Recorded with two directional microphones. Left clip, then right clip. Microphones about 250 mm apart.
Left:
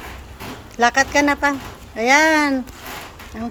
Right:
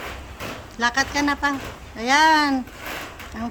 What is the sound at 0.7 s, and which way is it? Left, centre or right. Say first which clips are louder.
Speech: left 6 dB; centre.